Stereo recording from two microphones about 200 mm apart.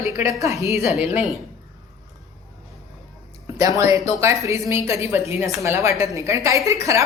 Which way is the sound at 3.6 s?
15° right (ahead or behind).